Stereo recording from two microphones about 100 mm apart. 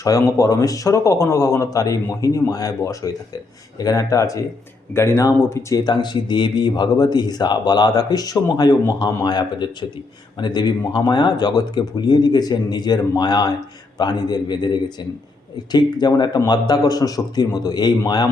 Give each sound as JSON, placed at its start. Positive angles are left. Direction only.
{"t": 0.0, "sound": "a man's voice", "side_deg": 35}
{"t": 5.8, "sound": "a man's voice", "side_deg": 50}